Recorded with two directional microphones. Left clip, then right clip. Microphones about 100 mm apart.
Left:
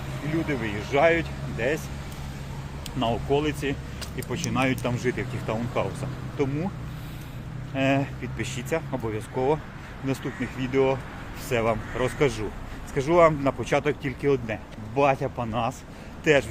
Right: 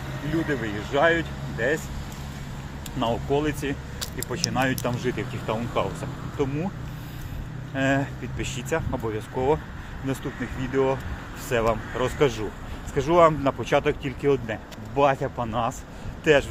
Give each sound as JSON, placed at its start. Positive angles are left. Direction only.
{"t": 0.4, "sound": "speech", "side_deg": 20}
{"t": 0.9, "sound": "speech", "side_deg": 30}
{"t": 3.0, "sound": "speech", "side_deg": 15}
{"t": 5.5, "sound": "speech", "side_deg": 10}
{"t": 6.3, "sound": "speech", "side_deg": 25}
{"t": 7.8, "sound": "speech", "side_deg": 20}
{"t": 10.6, "sound": "speech", "side_deg": 35}
{"t": 11.4, "sound": "speech", "side_deg": 20}